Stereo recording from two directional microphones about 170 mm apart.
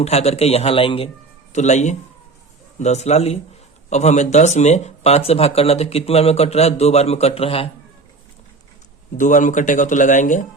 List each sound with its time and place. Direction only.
0.0 s speech: 40° left (ahead or behind)
9.1 s speech: 50° left (ahead or behind)